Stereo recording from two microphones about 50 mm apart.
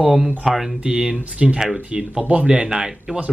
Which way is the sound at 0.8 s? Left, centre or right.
Centre.